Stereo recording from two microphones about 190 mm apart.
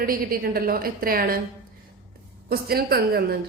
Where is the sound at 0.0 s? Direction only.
50° right (ahead or behind).